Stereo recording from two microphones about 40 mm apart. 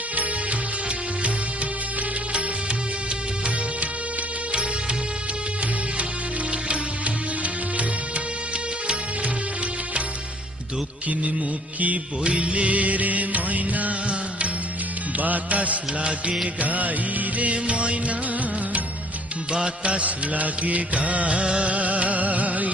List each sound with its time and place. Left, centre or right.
6.5 s music: right
12.2 s music: right
14.1 s music: right
19.5 s music: right
21.7 s music: right